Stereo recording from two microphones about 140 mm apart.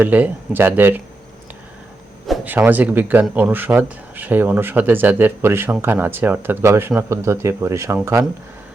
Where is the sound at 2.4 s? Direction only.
10° right (ahead or behind).